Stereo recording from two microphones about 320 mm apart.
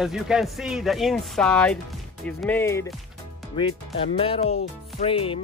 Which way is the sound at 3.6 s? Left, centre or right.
Centre.